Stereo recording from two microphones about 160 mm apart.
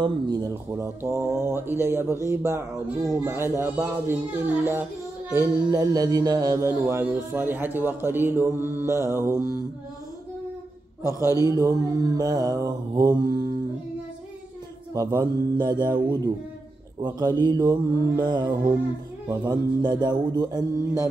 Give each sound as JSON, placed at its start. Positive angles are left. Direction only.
{"t": 0.0, "sound": "speech", "side_deg": -25}
{"t": 5.3, "sound": "speech", "side_deg": -20}
{"t": 11.1, "sound": "mantra", "side_deg": -20}
{"t": 15.0, "sound": "mantra", "side_deg": -25}
{"t": 17.5, "sound": "mantra", "side_deg": -25}